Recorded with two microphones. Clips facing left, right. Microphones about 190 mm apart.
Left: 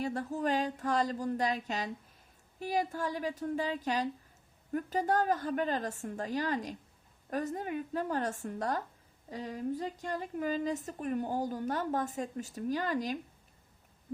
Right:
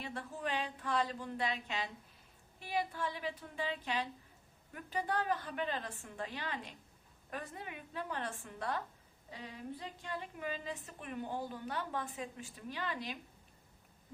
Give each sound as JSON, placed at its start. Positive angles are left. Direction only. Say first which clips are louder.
{"t": 0.0, "sound": "a woman's voice", "louder": "left 9 dB", "side_deg": 40}